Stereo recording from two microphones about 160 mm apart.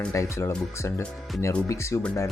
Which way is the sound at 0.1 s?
20° left (ahead or behind).